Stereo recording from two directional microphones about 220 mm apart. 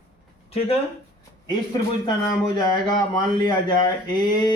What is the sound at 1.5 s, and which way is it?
Speech, 20° left (ahead or behind).